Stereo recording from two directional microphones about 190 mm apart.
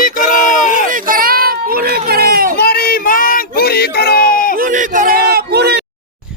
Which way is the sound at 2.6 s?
55° left (ahead or behind).